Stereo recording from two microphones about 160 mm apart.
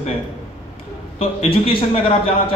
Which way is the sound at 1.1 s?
35° left (ahead or behind).